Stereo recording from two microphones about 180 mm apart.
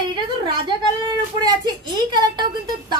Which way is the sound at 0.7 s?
25° right (ahead or behind).